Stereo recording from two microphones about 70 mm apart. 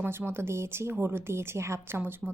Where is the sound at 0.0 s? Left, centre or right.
Right.